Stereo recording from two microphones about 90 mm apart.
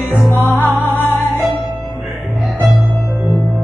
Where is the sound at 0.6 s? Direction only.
25° right (ahead or behind).